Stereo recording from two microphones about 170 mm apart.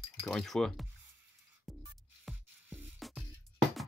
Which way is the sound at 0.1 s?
5° left (ahead or behind).